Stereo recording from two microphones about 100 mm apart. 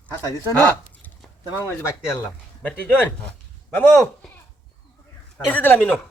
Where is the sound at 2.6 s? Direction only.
15° left (ahead or behind).